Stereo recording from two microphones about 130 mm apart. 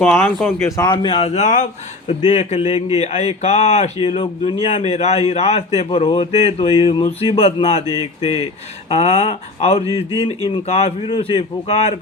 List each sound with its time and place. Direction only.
0.0 s speech: 5° left (ahead or behind)
0.8 s a man's voice: 40° left (ahead or behind)